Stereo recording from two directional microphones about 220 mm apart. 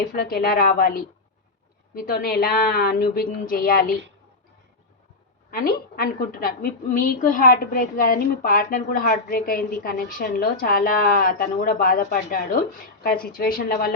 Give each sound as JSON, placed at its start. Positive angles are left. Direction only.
{"t": 0.1, "sound": "a woman's voice", "side_deg": 45}
{"t": 5.5, "sound": "a woman's voice", "side_deg": 40}